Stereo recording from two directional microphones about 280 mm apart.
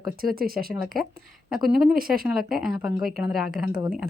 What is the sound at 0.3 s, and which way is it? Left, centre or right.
Speech, right.